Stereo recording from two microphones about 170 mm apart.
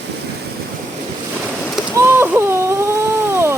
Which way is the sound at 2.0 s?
15° right (ahead or behind).